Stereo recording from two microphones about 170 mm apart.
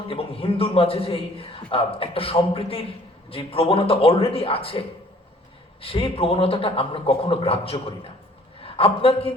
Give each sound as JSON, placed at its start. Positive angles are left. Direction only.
{"t": 0.1, "sound": "a man's voice", "side_deg": 35}